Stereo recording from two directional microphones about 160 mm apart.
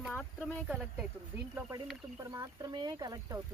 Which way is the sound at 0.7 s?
5° right (ahead or behind).